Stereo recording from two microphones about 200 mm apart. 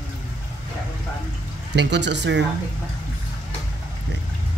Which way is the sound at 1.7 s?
60° right (ahead or behind).